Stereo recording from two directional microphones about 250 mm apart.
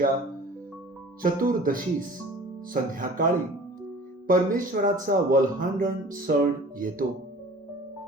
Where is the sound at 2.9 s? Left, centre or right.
Right.